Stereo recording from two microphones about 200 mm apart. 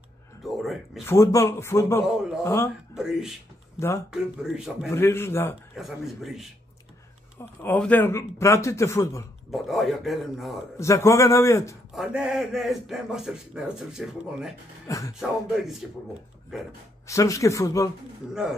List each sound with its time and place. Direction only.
0.4 s a sound: centre (ahead or behind)
1.0 s a man's voice: 15° left (ahead or behind)
2.9 s speech: 5° right (ahead or behind)
4.8 s a man's voice: 15° left (ahead or behind)
5.8 s speech: centre (ahead or behind)
7.3 s a man's voice: 10° left (ahead or behind)
9.5 s speech: centre (ahead or behind)
10.8 s a man's voice: 15° left (ahead or behind)
11.9 s speech: 5° right (ahead or behind)
14.9 s a man's voice: 15° left (ahead or behind)
15.1 s speech: centre (ahead or behind)
17.1 s a man's voice: 15° left (ahead or behind)